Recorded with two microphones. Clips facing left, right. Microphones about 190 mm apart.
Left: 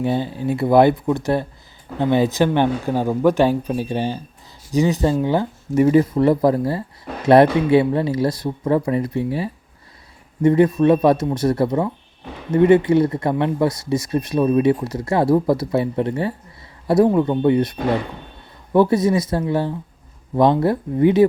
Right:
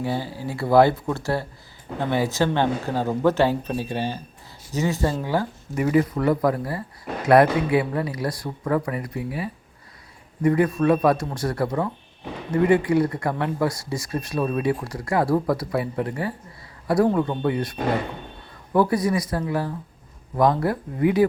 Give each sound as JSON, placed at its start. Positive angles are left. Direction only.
{"t": 0.0, "sound": "speech", "side_deg": 20}